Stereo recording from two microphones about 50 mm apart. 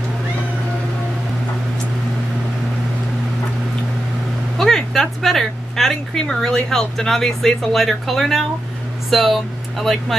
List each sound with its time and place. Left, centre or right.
4.6 s vehicle: centre
5.2 s speech: centre